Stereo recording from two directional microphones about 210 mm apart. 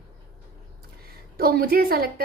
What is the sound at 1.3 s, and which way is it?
Speech, 45° right (ahead or behind).